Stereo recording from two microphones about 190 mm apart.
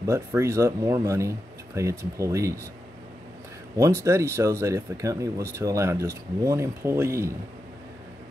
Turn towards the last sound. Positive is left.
turn(degrees=-15)  # may be behind; listen again after turning